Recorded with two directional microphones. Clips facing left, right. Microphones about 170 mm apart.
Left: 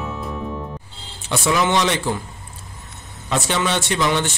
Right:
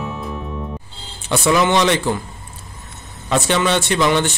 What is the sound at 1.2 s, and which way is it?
Speech, 60° right (ahead or behind).